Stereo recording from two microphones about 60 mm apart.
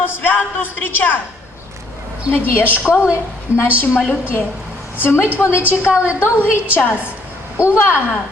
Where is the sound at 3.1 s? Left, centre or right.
Left.